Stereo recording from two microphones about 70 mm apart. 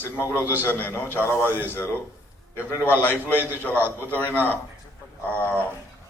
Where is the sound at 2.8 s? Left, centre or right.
Left.